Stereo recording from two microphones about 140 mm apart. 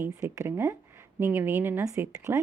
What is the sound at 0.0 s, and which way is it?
A woman's voice, 20° right (ahead or behind).